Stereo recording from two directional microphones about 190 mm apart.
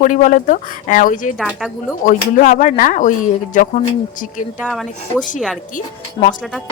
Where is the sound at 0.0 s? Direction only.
40° left (ahead or behind).